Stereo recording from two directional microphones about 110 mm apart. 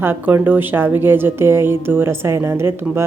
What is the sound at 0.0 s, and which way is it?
A woman's voice, 20° right (ahead or behind).